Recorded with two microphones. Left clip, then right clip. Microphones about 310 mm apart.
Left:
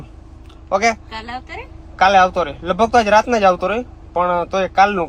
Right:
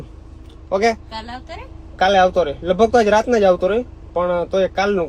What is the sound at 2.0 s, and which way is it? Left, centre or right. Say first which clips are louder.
A man's voice: left 1 dB; centre.